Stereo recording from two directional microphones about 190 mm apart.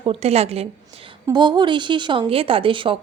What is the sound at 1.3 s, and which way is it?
Speech, 25° right (ahead or behind).